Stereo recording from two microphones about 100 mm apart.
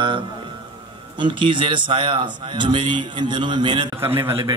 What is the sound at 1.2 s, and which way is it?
Speech, 55° right (ahead or behind).